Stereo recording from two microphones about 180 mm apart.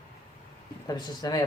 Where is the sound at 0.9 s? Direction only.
20° left (ahead or behind).